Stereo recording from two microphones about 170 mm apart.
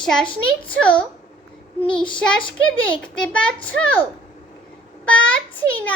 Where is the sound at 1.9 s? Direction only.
30° left (ahead or behind).